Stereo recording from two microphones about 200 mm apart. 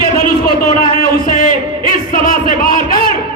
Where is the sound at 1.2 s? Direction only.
40° left (ahead or behind).